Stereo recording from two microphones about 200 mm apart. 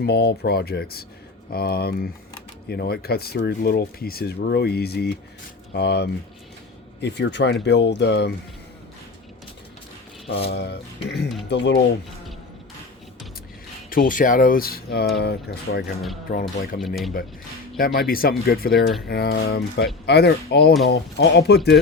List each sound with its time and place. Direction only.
0.0 s speech: 55° left (ahead or behind)
10.3 s speech: 55° left (ahead or behind)
13.9 s speech: 45° left (ahead or behind)
16.8 s speech: centre (ahead or behind)
17.7 s speech: 50° left (ahead or behind)